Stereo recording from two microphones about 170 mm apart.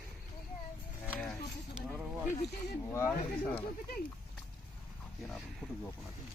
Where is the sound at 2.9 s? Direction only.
10° left (ahead or behind).